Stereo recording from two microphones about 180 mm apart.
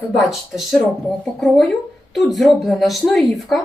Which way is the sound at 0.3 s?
Centre (ahead or behind).